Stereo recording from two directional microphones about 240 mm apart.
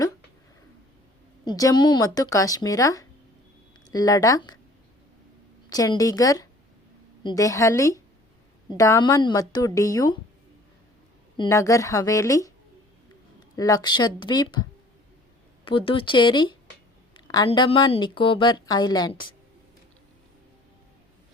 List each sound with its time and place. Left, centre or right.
1.5 s speech: centre
5.6 s speech: centre
11.3 s speech: centre
13.6 s speech: centre